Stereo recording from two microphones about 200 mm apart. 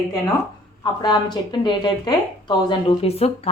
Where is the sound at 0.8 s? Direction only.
20° left (ahead or behind).